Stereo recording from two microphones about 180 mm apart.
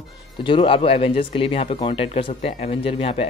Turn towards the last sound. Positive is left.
turn(degrees=30)  # may be behind; listen again after turning